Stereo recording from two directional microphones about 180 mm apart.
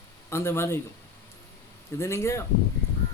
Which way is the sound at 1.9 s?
15° left (ahead or behind).